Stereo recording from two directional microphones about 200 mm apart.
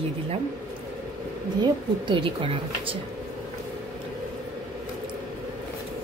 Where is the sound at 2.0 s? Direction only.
25° right (ahead or behind).